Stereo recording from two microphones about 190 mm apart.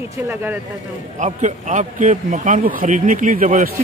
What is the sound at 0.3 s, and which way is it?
Speech, 10° right (ahead or behind).